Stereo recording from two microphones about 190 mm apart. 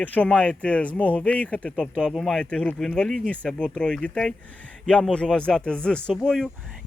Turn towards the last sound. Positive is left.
turn(degrees=0)  # may be behind; listen again after turning